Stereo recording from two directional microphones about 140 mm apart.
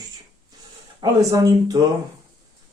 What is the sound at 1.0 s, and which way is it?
Speech, 25° right (ahead or behind).